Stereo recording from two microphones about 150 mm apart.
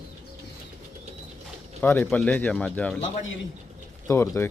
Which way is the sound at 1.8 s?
15° left (ahead or behind).